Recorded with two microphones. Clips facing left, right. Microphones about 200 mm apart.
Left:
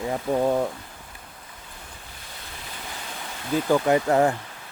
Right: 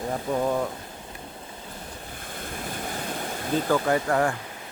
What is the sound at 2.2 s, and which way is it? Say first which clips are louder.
Waves: right 8 dB; 50° right (ahead or behind).